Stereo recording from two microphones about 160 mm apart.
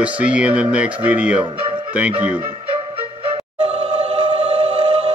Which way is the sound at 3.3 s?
40° right (ahead or behind).